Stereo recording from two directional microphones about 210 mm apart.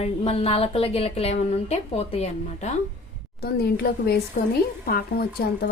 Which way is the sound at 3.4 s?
50° left (ahead or behind).